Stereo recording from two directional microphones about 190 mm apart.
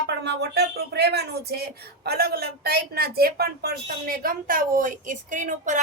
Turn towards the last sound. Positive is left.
turn(degrees=-40)  # may be behind; listen again after turning